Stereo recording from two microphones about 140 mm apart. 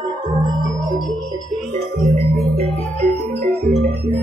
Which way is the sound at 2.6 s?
50° right (ahead or behind).